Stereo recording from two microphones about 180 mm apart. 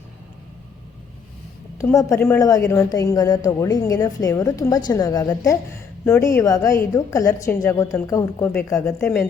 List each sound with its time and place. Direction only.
1.8 s a woman's voice: 15° left (ahead or behind)